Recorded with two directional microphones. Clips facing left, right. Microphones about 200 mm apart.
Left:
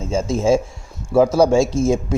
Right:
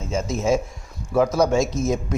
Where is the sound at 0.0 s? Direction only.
30° left (ahead or behind).